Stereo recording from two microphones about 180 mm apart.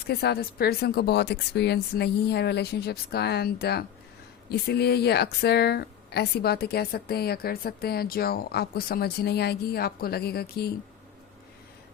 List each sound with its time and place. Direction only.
0.1 s a woman's voice: 60° left (ahead or behind)